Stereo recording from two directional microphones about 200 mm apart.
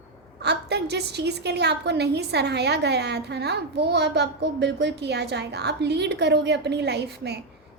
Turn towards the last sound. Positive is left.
turn(degrees=-55)  # may be behind; listen again after turning